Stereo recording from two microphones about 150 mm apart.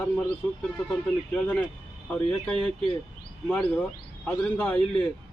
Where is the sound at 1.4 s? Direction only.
5° left (ahead or behind).